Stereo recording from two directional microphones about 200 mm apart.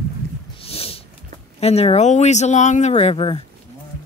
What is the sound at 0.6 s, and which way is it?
Snort, 30° left (ahead or behind).